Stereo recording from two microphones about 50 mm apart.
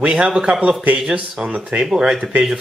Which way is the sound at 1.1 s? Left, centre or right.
Right.